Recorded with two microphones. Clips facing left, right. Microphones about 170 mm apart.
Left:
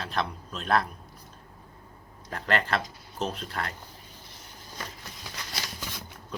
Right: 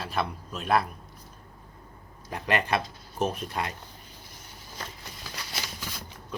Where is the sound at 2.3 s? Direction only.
15° right (ahead or behind).